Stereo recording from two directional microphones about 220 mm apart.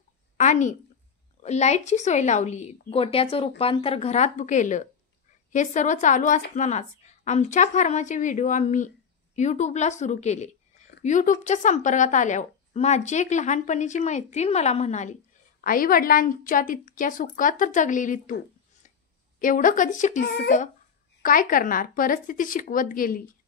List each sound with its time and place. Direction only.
0.4 s a woman's voice: 35° left (ahead or behind)
20.2 s a woman's voice: 50° left (ahead or behind)